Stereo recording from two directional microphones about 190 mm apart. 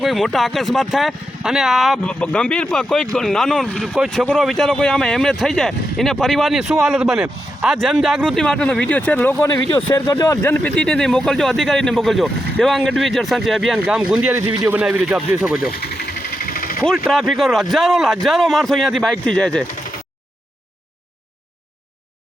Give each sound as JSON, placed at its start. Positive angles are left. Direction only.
{"t": 0.0, "sound": "speech", "side_deg": 0}
{"t": 14.4, "sound": "speech", "side_deg": -25}
{"t": 14.7, "sound": "a man's voice", "side_deg": -5}
{"t": 15.7, "sound": "vehicle", "side_deg": 55}
{"t": 16.8, "sound": "speech", "side_deg": 5}